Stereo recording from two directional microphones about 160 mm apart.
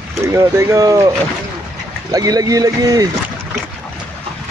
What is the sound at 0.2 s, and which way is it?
Speech, 20° right (ahead or behind).